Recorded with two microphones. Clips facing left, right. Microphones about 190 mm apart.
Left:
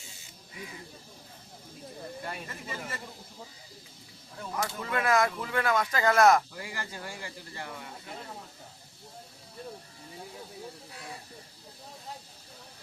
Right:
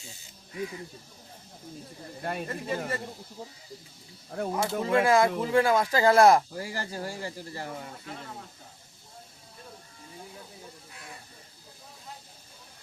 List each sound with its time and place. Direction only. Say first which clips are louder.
2.2 s speech: right 7 dB; 50° right (ahead or behind)
4.3 s speech: right 11 dB; 65° right (ahead or behind)
4.8 s speech: right 5 dB; 30° right (ahead or behind)